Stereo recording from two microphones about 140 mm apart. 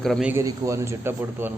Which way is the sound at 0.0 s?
Centre (ahead or behind).